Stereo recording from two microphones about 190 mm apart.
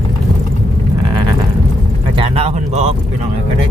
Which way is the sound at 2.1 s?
30° right (ahead or behind).